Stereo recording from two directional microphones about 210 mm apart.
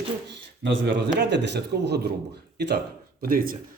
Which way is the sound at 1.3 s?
55° right (ahead or behind).